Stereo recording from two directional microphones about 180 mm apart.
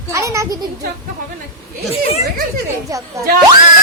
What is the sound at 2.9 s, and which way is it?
Speech, 20° right (ahead or behind).